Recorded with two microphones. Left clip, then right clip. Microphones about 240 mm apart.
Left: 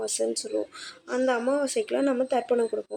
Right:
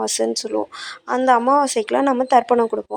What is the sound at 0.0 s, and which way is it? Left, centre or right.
Speech, right.